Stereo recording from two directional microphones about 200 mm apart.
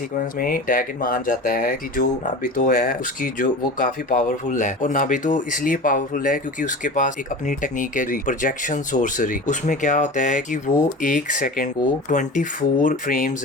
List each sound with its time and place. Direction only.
0.3 s speech: 45° left (ahead or behind)